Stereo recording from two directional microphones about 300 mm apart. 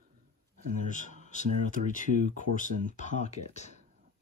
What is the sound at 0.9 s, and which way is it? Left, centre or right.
Speech, left.